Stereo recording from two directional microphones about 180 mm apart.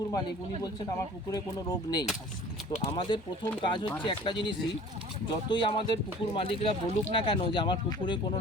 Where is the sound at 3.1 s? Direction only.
25° left (ahead or behind).